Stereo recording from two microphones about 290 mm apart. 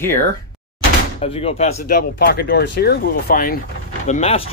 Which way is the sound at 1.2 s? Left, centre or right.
Left.